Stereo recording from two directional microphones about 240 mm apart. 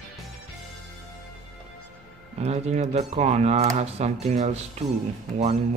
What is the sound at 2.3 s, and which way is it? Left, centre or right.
Speech, right.